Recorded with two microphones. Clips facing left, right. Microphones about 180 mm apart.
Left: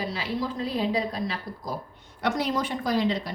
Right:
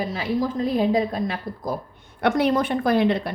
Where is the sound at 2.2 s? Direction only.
60° right (ahead or behind).